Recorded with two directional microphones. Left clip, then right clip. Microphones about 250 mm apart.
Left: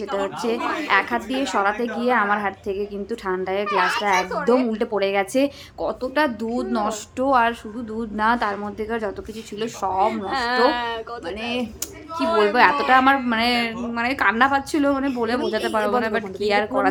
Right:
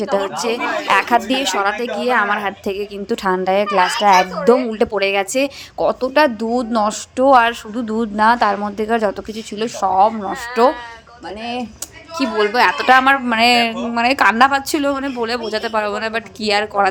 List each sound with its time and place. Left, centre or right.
0.0 s a woman's voice: right
12.1 s a woman's voice: right